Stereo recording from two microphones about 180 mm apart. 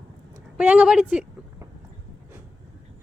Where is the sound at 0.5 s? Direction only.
5° right (ahead or behind).